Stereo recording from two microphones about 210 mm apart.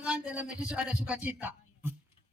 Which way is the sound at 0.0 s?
5° right (ahead or behind).